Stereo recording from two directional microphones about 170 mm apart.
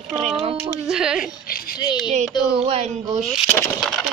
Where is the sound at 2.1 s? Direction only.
40° right (ahead or behind).